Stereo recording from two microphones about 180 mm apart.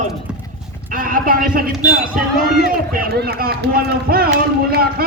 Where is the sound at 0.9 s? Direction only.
50° right (ahead or behind).